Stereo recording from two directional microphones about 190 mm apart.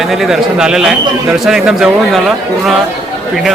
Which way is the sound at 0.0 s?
Centre (ahead or behind).